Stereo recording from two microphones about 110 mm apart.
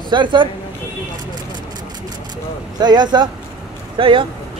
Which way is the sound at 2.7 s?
40° right (ahead or behind).